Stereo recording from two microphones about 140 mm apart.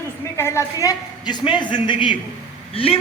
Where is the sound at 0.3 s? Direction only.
20° left (ahead or behind).